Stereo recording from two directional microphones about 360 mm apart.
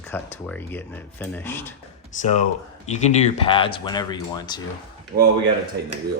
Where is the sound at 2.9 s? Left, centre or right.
Centre.